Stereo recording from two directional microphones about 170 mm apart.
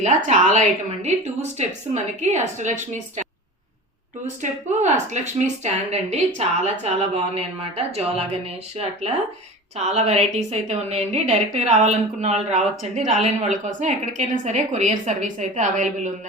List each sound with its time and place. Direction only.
0.3 s a woman's voice: 45° right (ahead or behind)
4.8 s a woman's voice: 45° right (ahead or behind)